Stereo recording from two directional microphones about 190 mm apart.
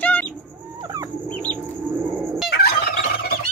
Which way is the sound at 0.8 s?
20° right (ahead or behind).